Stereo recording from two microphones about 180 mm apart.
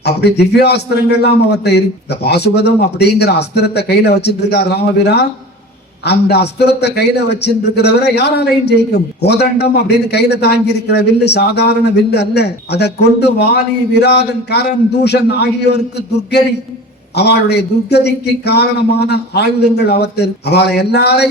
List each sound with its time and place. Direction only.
0.0 s a man's voice: 65° left (ahead or behind)
17.2 s a man's voice: 65° left (ahead or behind)